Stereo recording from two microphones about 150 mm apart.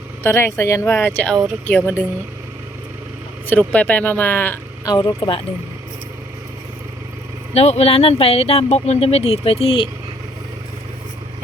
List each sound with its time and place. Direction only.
0.2 s speech: 15° left (ahead or behind)
3.4 s speech: 10° left (ahead or behind)
4.9 s speech: 25° left (ahead or behind)
7.5 s speech: 45° left (ahead or behind)